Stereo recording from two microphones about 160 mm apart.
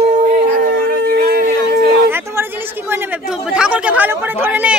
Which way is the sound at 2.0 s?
15° right (ahead or behind).